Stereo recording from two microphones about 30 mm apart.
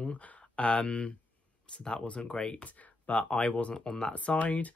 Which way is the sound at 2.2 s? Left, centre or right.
Left.